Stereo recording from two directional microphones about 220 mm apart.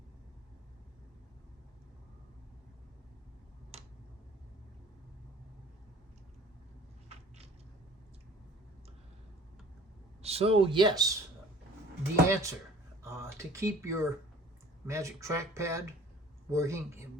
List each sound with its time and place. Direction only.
7.1 s a sound: 30° right (ahead or behind)
10.2 s speech: 25° right (ahead or behind)
12.3 s speech: 15° right (ahead or behind)